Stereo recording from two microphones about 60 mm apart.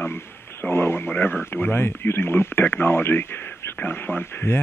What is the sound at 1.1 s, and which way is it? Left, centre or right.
Speech, left.